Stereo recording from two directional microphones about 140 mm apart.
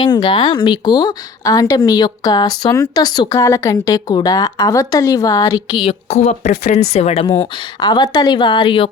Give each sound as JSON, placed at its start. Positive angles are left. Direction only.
{"t": 0.0, "sound": "speech", "side_deg": 35}
{"t": 5.7, "sound": "speech", "side_deg": 40}
{"t": 7.8, "sound": "a woman's voice", "side_deg": 30}